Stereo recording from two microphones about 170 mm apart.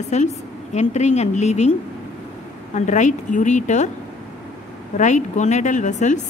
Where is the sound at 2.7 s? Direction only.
45° left (ahead or behind).